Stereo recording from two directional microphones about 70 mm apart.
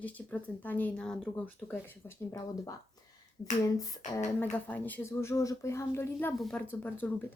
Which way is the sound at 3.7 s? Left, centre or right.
Left.